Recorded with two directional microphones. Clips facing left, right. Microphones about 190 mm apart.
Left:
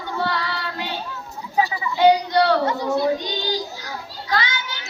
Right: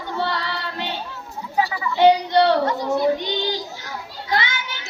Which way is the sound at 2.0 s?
25° right (ahead or behind).